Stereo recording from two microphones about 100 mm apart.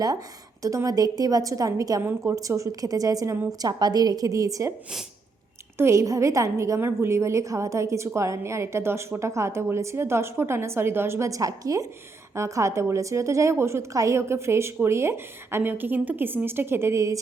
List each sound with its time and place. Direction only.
0.6 s a woman's voice: 35° right (ahead or behind)
2.0 s a woman's voice: 25° right (ahead or behind)
5.7 s a woman's voice: 30° right (ahead or behind)